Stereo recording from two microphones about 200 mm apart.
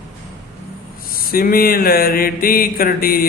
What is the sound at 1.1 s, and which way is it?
Speech, 45° left (ahead or behind).